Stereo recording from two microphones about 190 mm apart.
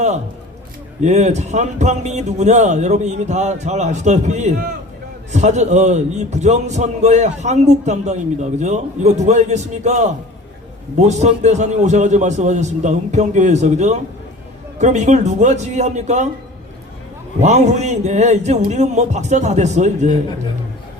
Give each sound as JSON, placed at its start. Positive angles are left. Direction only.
{"t": 1.0, "sound": "a man's voice", "side_deg": -35}
{"t": 17.4, "sound": "a man's voice", "side_deg": -35}